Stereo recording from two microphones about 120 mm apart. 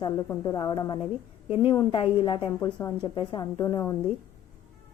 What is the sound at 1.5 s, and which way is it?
A woman's voice, 50° left (ahead or behind).